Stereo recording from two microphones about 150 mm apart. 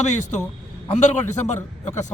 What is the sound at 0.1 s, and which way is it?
A man's voice, 55° left (ahead or behind).